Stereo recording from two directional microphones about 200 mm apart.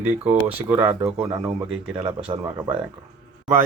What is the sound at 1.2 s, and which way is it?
Speech, 20° right (ahead or behind).